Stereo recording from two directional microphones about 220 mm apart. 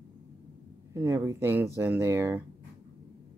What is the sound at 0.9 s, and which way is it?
Speech, 15° right (ahead or behind).